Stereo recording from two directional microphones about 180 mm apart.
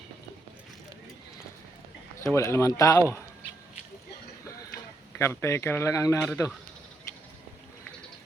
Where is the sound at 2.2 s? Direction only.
15° left (ahead or behind).